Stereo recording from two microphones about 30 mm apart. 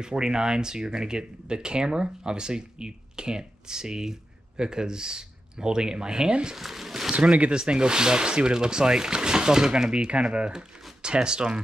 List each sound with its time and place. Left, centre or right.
0.0 s speech: right
6.5 s a sound: centre
7.2 s speech: right
7.5 s speech: right